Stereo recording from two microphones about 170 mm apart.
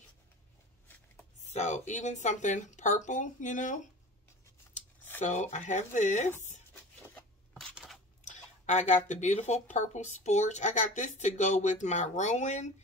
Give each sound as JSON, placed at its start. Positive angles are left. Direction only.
{"t": 1.5, "sound": "speech", "side_deg": 45}
{"t": 5.2, "sound": "speech", "side_deg": 45}
{"t": 7.5, "sound": "a sound", "side_deg": 0}
{"t": 8.2, "sound": "speech", "side_deg": 45}